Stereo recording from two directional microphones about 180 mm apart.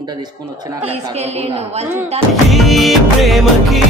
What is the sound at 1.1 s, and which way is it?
Speech, 35° right (ahead or behind).